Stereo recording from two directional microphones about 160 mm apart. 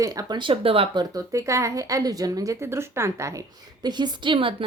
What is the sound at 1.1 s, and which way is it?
A woman's voice, 20° right (ahead or behind).